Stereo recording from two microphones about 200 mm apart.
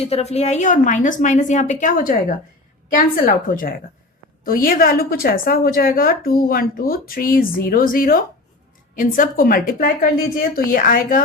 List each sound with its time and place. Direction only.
0.0 s a woman's voice: 30° left (ahead or behind)